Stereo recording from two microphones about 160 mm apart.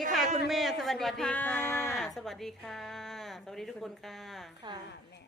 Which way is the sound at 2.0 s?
Centre (ahead or behind).